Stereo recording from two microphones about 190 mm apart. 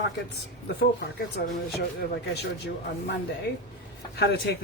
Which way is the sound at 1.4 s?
55° left (ahead or behind).